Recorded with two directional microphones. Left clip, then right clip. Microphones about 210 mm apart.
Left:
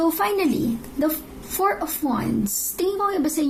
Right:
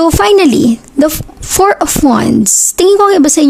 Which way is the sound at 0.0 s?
50° right (ahead or behind).